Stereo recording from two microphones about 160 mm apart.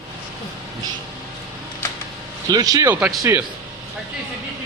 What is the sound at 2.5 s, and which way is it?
Speech, 25° right (ahead or behind).